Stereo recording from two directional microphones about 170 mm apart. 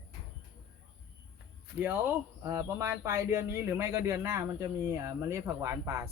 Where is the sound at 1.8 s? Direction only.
10° right (ahead or behind).